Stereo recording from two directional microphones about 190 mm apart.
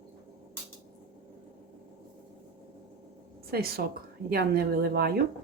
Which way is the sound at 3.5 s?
55° right (ahead or behind).